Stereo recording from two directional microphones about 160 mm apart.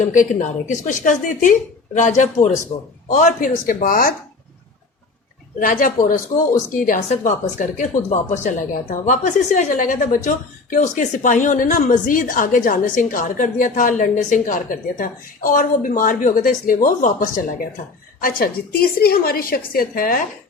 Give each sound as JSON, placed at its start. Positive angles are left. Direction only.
{"t": 0.0, "sound": "a woman's voice", "side_deg": 55}
{"t": 5.5, "sound": "a woman's voice", "side_deg": 60}